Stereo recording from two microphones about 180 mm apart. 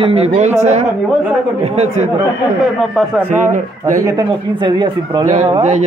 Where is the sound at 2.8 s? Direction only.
Centre (ahead or behind).